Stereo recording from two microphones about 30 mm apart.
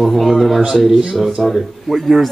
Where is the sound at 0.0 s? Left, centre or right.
Centre.